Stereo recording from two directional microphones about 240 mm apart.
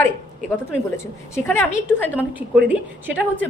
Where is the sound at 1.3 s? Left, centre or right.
Centre.